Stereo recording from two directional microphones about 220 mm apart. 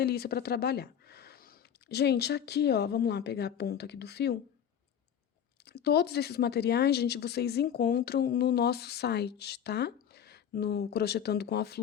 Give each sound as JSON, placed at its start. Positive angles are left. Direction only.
{"t": 0.0, "sound": "speech", "side_deg": 45}
{"t": 5.6, "sound": "speech", "side_deg": 50}